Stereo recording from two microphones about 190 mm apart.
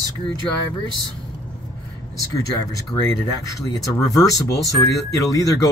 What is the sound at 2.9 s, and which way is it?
Speech, 20° left (ahead or behind).